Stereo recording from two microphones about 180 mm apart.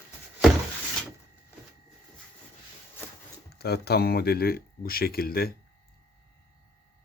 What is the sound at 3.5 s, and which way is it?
Speech, 60° left (ahead or behind).